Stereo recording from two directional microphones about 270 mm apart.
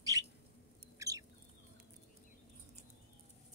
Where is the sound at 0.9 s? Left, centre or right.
Centre.